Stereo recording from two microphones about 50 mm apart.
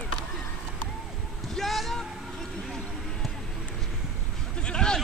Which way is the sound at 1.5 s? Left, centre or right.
Centre.